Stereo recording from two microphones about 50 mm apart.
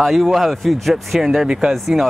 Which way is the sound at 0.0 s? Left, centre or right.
Centre.